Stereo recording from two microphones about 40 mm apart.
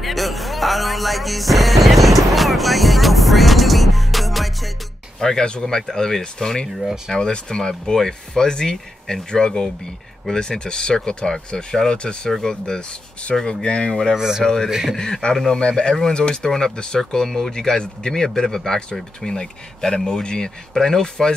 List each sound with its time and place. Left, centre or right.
0.0 s music: centre
5.2 s speech: centre
12.3 s speech: centre
14.1 s speech: centre
14.4 s speech: centre